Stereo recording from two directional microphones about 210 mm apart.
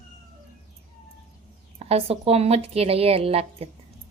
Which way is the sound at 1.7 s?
30° right (ahead or behind).